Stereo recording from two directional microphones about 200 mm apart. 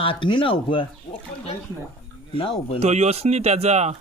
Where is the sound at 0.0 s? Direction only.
25° left (ahead or behind).